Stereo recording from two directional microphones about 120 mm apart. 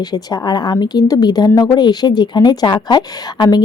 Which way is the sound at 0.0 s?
35° left (ahead or behind).